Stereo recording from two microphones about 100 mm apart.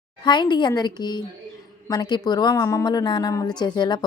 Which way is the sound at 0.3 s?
50° left (ahead or behind).